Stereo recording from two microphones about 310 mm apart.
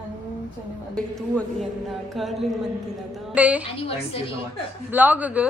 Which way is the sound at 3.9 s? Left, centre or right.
Centre.